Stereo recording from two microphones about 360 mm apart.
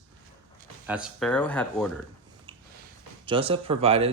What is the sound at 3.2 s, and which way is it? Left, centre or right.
Speech, centre.